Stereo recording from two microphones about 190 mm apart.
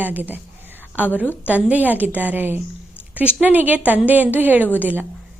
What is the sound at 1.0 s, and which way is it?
Speech, 10° left (ahead or behind).